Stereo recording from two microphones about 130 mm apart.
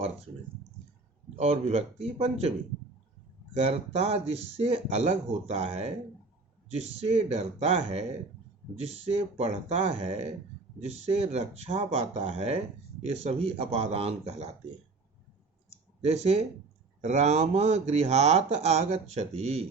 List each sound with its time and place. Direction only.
1.4 s speech: 55° right (ahead or behind)
3.5 s speech: 55° right (ahead or behind)
16.0 s speech: 55° right (ahead or behind)